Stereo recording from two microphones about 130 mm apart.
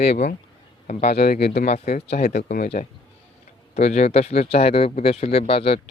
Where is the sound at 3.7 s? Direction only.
55° left (ahead or behind).